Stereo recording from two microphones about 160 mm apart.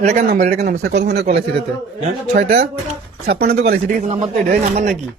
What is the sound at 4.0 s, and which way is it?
Speech, 45° right (ahead or behind).